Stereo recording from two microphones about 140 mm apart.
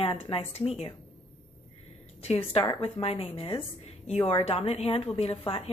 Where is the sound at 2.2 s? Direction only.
45° left (ahead or behind).